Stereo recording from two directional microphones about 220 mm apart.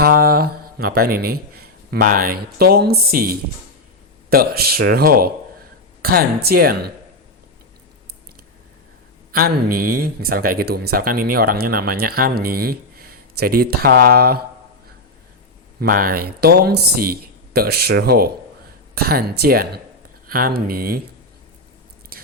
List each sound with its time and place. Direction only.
0.0 s speech: 45° right (ahead or behind)
9.3 s speech: 40° right (ahead or behind)
15.8 s speech: 40° right (ahead or behind)
22.1 s biting: 45° right (ahead or behind)